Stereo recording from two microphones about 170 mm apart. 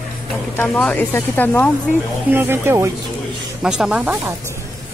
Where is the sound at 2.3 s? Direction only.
10° right (ahead or behind).